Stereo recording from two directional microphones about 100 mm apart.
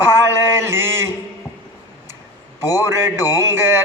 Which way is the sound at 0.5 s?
25° right (ahead or behind).